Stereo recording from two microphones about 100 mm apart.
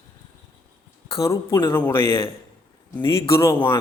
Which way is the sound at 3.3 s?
30° left (ahead or behind).